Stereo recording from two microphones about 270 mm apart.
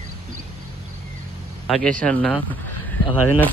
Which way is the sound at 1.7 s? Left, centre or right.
Centre.